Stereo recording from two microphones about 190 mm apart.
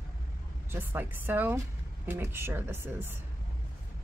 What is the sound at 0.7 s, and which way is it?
Speech, 10° right (ahead or behind).